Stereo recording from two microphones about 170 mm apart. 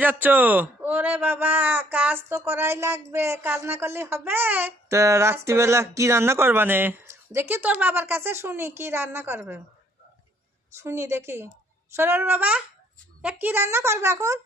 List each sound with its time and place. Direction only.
0.0 s a man's voice: 10° right (ahead or behind)
10.8 s a man's voice: 15° right (ahead or behind)